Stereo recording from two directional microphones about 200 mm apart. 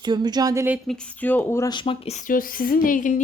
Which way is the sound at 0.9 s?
10° left (ahead or behind).